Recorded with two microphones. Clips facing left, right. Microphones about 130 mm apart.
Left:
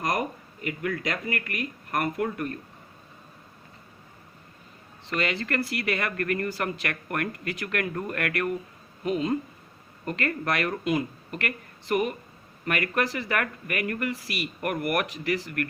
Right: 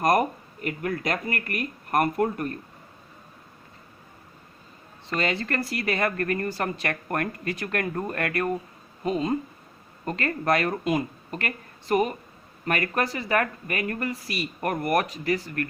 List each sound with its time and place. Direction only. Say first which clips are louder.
0.0 s speech: right 6 dB; 45° right (ahead or behind)
5.0 s speech: right 2 dB; 40° right (ahead or behind)